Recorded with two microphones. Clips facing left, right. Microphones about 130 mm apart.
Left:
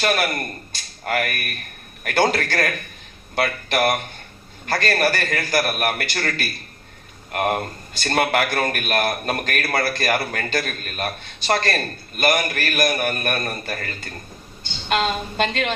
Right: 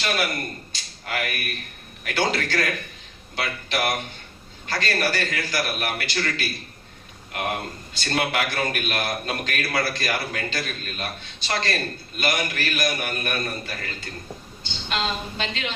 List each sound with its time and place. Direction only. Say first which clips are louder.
0.7 s a man's voice: left 6 dB; 50° left (ahead or behind)